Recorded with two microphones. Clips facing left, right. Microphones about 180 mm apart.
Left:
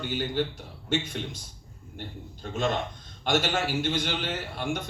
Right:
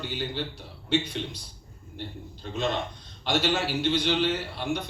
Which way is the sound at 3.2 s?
50° left (ahead or behind).